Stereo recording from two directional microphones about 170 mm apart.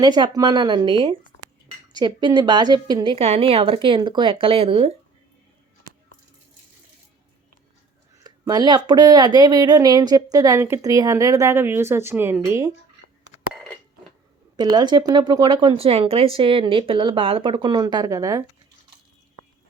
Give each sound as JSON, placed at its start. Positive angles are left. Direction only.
{"t": 0.0, "sound": "speech", "side_deg": -25}
{"t": 8.2, "sound": "speech", "side_deg": -25}
{"t": 14.5, "sound": "speech", "side_deg": -25}